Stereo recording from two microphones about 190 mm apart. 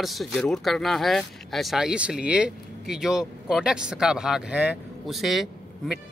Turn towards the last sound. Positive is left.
turn(degrees=0)  # may be behind; listen again after turning